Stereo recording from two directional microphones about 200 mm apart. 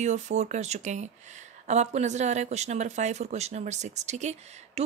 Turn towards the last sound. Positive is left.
turn(degrees=-35)  # may be behind; listen again after turning